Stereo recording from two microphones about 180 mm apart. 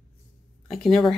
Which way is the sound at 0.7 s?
Centre (ahead or behind).